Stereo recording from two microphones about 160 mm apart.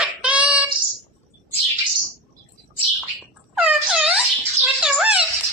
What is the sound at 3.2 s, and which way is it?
Wail, 5° right (ahead or behind).